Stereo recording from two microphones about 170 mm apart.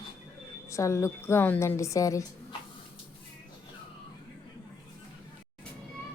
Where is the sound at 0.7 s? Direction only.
15° left (ahead or behind).